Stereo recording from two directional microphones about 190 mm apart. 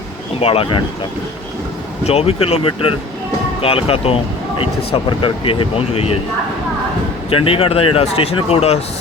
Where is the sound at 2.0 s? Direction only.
30° left (ahead or behind).